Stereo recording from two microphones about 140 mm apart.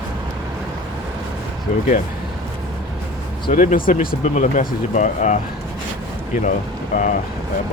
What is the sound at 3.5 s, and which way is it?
Speech, 70° left (ahead or behind).